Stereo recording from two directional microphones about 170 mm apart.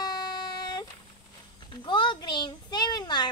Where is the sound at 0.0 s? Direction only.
25° left (ahead or behind).